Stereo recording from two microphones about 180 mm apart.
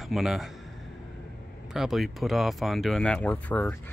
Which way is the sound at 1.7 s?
Centre (ahead or behind).